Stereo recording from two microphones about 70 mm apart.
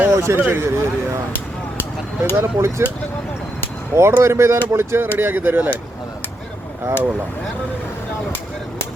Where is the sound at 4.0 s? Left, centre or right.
Right.